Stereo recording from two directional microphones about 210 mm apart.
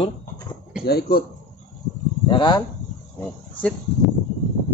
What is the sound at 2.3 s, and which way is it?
Speech, 20° left (ahead or behind).